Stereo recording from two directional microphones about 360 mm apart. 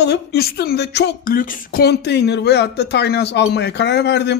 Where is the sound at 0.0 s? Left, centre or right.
Left.